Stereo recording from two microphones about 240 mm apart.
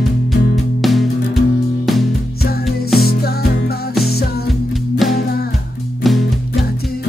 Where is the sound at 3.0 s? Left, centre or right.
Left.